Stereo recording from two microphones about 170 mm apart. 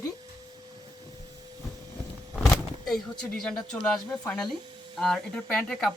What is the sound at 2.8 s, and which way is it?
Speech, 5° left (ahead or behind).